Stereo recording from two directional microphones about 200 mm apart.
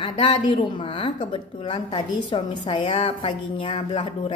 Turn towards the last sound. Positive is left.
turn(degrees=25)  # may be behind; listen again after turning